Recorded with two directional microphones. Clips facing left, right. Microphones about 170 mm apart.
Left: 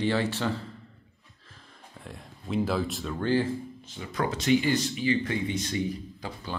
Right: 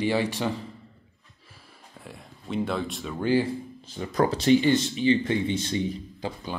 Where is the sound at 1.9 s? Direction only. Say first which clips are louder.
Even; centre (ahead or behind).